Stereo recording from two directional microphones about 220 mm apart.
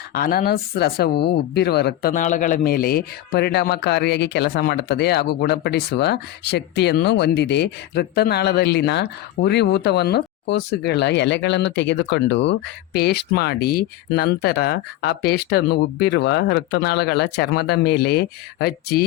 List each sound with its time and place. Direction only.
0.1 s speech: 40° left (ahead or behind)